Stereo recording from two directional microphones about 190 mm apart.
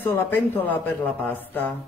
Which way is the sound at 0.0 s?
10° left (ahead or behind).